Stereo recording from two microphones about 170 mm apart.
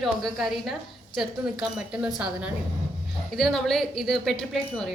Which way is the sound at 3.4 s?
Centre (ahead or behind).